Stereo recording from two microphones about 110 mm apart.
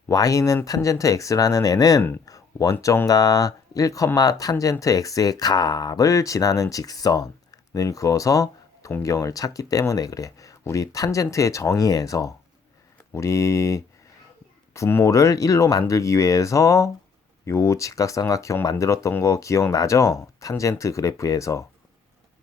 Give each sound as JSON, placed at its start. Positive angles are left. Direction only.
{"t": 0.1, "sound": "speech", "side_deg": 30}
{"t": 2.2, "sound": "a sound", "side_deg": 30}
{"t": 2.8, "sound": "speech", "side_deg": 25}